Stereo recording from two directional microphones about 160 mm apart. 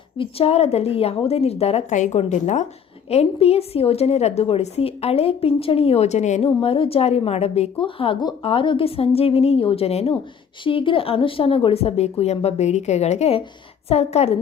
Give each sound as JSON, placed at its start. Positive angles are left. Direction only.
{"t": 0.2, "sound": "a woman's voice", "side_deg": 40}